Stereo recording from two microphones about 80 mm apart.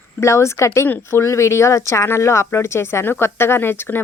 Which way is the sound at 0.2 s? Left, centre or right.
Left.